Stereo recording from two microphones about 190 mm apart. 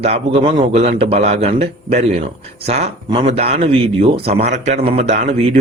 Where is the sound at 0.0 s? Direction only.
30° right (ahead or behind).